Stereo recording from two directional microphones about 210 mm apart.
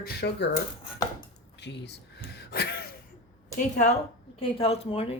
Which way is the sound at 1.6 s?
50° left (ahead or behind).